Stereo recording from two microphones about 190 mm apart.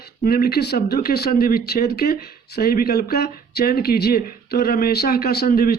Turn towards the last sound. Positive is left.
turn(degrees=50)  # may be behind; listen again after turning